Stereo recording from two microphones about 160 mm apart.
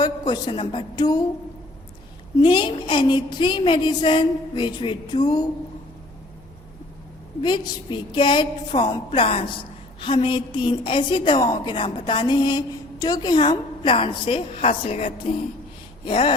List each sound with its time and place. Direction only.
0.0 s a woman's voice: 30° left (ahead or behind)
2.4 s a woman's voice: 30° left (ahead or behind)
7.4 s a woman's voice: 25° left (ahead or behind)
14.8 s a woman's voice: 45° left (ahead or behind)
16.0 s speech: 35° left (ahead or behind)